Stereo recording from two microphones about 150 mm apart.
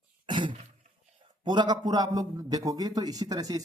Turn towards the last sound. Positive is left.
turn(degrees=-25)  # may be behind; listen again after turning